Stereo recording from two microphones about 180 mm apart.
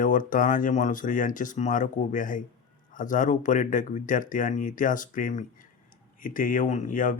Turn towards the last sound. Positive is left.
turn(degrees=45)  # may be behind; listen again after turning